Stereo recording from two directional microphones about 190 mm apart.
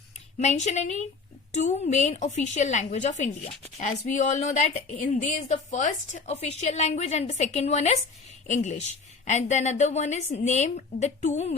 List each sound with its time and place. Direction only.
0.3 s a woman's voice: 35° left (ahead or behind)